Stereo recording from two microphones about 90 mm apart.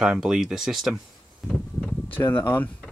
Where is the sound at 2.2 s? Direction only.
30° left (ahead or behind).